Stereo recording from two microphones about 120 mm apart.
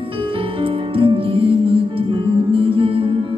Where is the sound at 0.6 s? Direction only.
45° right (ahead or behind).